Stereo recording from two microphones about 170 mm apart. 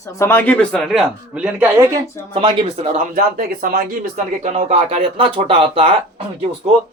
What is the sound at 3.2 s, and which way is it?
Speech, 60° right (ahead or behind).